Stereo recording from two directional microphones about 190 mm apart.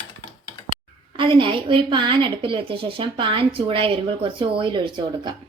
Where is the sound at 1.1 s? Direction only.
25° right (ahead or behind).